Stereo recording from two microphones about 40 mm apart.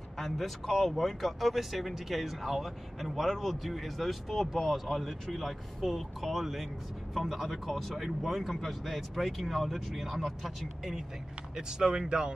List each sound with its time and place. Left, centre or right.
0.2 s speech: centre
11.5 s speech: centre